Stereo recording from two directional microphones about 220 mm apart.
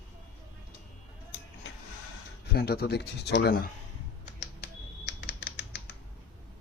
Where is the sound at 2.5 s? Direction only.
45° left (ahead or behind).